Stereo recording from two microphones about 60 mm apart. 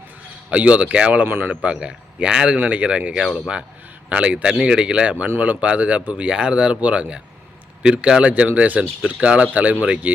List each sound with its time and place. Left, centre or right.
0.5 s speech: right
1.2 s a man's voice: right
1.6 s speech: centre
2.6 s speech: right
3.1 s speech: centre
3.3 s speech: centre